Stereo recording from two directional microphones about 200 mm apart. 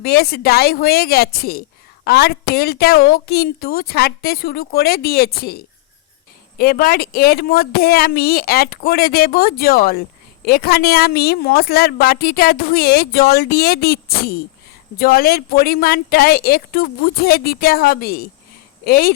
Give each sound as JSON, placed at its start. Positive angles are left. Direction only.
{"t": 0.0, "sound": "a woman's voice", "side_deg": 50}